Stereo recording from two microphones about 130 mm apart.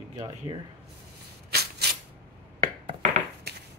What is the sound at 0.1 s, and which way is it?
Speech, 30° right (ahead or behind).